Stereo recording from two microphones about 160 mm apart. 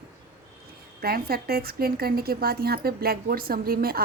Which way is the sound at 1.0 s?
70° right (ahead or behind).